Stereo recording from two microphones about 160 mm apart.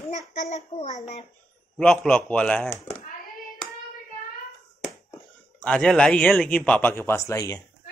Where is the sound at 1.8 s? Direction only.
5° left (ahead or behind).